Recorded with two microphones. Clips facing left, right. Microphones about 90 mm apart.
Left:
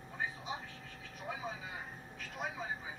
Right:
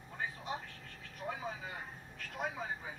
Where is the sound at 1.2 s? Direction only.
55° right (ahead or behind).